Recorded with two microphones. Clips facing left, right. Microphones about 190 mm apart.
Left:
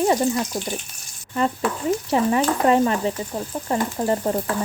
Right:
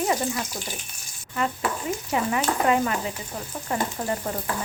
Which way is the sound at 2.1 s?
35° left (ahead or behind).